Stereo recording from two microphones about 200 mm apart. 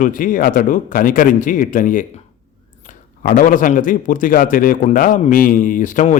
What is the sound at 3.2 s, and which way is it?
A man's voice, 45° left (ahead or behind).